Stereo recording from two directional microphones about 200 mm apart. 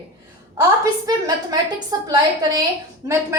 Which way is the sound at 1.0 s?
20° right (ahead or behind).